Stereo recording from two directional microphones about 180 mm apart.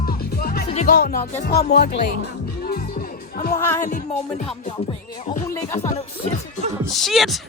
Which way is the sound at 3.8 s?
45° left (ahead or behind).